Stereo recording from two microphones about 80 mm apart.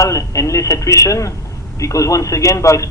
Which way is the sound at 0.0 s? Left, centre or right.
Left.